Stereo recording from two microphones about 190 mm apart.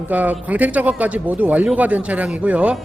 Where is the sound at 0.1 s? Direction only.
10° right (ahead or behind).